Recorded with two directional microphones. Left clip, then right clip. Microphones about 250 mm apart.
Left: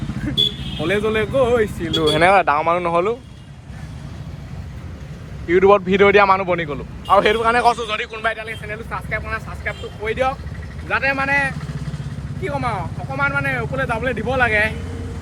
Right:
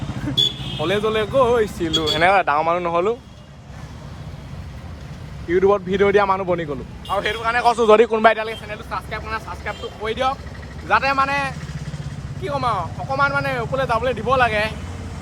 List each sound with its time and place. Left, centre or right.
0.8 s speech: centre
5.5 s a man's voice: centre
7.7 s a man's voice: right
8.7 s speech: centre